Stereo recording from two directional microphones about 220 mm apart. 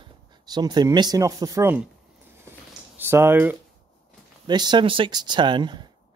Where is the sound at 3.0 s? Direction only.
10° right (ahead or behind).